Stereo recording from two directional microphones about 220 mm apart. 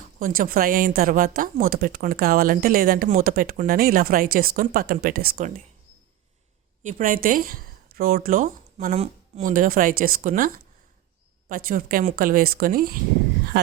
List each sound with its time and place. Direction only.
0.2 s speech: 40° right (ahead or behind)
6.8 s speech: 40° right (ahead or behind)